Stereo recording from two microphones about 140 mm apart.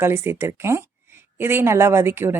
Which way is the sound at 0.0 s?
15° right (ahead or behind).